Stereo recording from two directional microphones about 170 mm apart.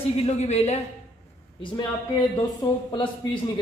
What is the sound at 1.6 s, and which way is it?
Speech, 25° left (ahead or behind).